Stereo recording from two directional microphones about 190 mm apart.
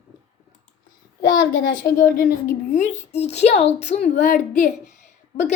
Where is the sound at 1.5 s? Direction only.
45° left (ahead or behind).